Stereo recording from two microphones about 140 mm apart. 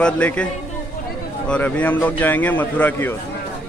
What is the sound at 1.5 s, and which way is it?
A man's voice, 10° left (ahead or behind).